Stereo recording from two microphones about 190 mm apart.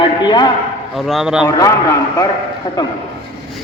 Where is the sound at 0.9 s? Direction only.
Centre (ahead or behind).